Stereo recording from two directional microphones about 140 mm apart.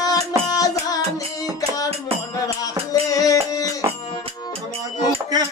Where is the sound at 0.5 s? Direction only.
25° left (ahead or behind).